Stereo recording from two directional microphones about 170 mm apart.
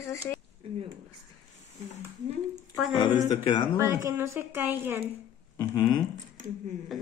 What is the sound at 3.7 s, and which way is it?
A woman's voice, 15° right (ahead or behind).